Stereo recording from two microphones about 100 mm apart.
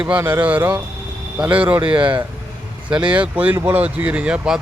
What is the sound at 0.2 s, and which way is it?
Speech, 20° right (ahead or behind).